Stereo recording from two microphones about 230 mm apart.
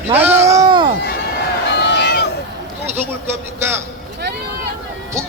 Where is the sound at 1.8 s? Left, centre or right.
Left.